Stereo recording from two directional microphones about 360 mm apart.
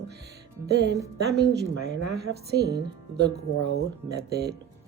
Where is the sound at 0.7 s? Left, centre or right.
Right.